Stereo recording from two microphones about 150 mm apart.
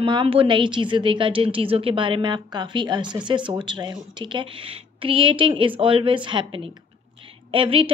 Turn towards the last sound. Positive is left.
turn(degrees=-35)  # may be behind; listen again after turning